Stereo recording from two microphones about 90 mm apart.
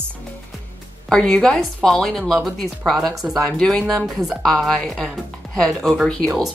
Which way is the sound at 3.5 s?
10° left (ahead or behind).